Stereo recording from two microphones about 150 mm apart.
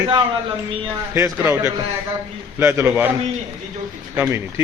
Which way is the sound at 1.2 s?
20° right (ahead or behind).